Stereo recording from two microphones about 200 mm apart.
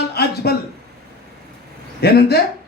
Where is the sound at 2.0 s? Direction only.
50° left (ahead or behind).